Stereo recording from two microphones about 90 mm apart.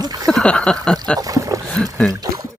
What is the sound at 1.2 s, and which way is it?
Speech, 40° right (ahead or behind).